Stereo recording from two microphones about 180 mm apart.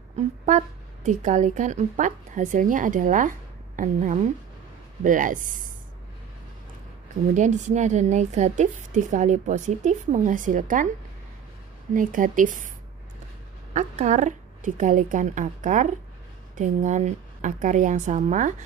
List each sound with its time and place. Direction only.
0.2 s a woman's voice: 40° right (ahead or behind)
7.3 s a woman's voice: 40° right (ahead or behind)
11.9 s a woman's voice: 50° right (ahead or behind)
13.7 s a woman's voice: 40° right (ahead or behind)